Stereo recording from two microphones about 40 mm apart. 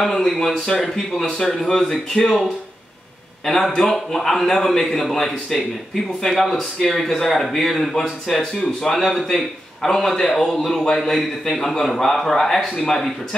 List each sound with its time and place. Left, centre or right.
0.0 s a man's voice: centre